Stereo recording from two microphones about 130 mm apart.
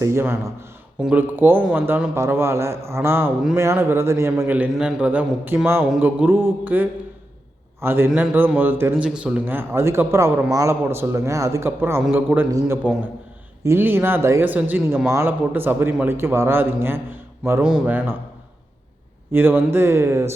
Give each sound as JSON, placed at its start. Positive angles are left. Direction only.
{"t": 0.0, "sound": "a man's voice", "side_deg": -20}
{"t": 17.6, "sound": "a man's voice", "side_deg": -5}
{"t": 19.3, "sound": "a man's voice", "side_deg": -15}